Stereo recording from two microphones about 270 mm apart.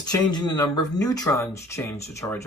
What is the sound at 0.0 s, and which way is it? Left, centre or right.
Speech, centre.